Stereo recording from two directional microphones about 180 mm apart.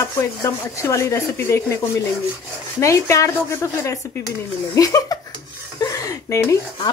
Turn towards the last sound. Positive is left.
turn(degrees=15)  # may be behind; listen again after turning